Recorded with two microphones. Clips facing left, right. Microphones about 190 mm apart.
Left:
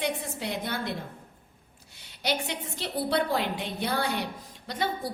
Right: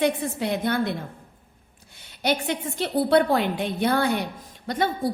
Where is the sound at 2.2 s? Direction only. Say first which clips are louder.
Right 6 dB; 55° right (ahead or behind).